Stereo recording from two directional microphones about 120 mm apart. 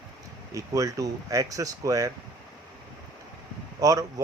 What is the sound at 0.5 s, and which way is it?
Speech, 25° right (ahead or behind).